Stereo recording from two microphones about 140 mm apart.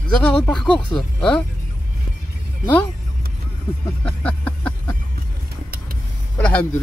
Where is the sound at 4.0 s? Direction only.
10° left (ahead or behind).